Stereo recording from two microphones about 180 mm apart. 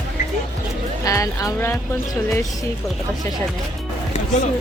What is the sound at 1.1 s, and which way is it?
Speech, 20° left (ahead or behind).